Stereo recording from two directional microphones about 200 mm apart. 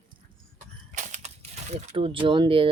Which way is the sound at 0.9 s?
35° right (ahead or behind).